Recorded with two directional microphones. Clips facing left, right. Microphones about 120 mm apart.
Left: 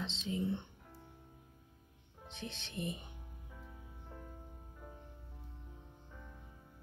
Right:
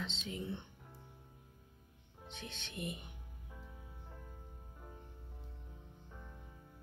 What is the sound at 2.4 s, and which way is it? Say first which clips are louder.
Speech: left 3 dB; 30° left (ahead or behind).